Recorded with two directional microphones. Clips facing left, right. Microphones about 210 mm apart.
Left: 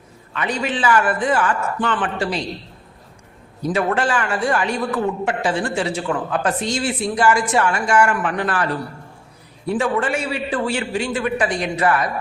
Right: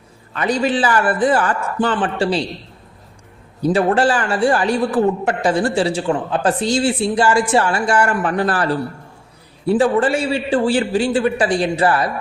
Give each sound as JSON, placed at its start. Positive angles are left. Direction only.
{"t": 0.3, "sound": "a man's voice", "side_deg": -35}
{"t": 3.6, "sound": "a man's voice", "side_deg": -30}